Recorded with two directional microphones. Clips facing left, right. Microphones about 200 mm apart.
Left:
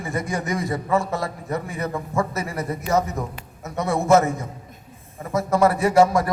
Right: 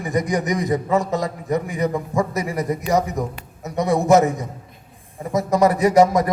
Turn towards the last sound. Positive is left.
turn(degrees=-20)  # may be behind; listen again after turning